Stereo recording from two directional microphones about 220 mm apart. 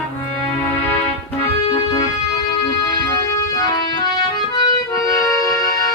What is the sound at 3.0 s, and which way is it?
Music, 15° left (ahead or behind).